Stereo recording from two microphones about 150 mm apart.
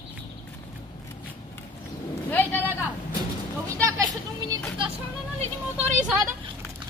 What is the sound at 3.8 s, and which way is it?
Speech, 25° right (ahead or behind).